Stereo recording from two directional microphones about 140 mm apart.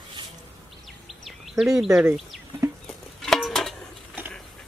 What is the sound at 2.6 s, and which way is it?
Bird flight, 20° right (ahead or behind).